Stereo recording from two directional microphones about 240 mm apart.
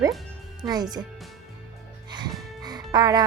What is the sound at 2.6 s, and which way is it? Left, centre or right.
Music, centre.